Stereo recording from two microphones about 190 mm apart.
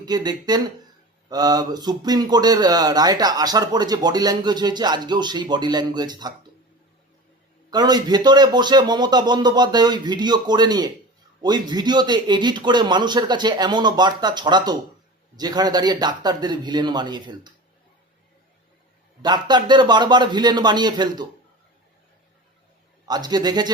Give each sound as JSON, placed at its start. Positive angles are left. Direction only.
{"t": 0.0, "sound": "speech", "side_deg": -20}
{"t": 7.7, "sound": "speech", "side_deg": -20}
{"t": 19.2, "sound": "speech", "side_deg": -20}
{"t": 23.0, "sound": "speech", "side_deg": -20}